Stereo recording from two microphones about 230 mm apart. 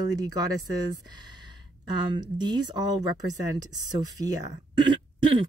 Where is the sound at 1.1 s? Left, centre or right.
Centre.